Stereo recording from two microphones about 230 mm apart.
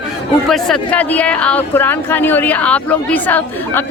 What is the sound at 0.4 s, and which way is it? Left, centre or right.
A man's voice, centre.